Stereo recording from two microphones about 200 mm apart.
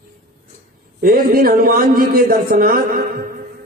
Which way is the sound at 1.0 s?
45° right (ahead or behind).